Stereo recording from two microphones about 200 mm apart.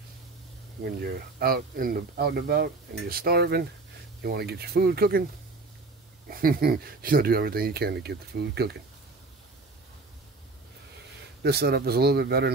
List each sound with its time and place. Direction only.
0.8 s speech: 50° right (ahead or behind)
6.2 s speech: 45° right (ahead or behind)
11.4 s speech: 55° right (ahead or behind)